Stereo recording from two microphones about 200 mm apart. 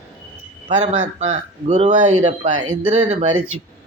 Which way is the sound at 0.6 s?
35° right (ahead or behind).